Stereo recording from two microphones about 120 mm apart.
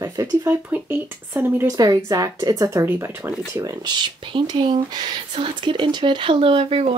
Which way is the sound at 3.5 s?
35° right (ahead or behind).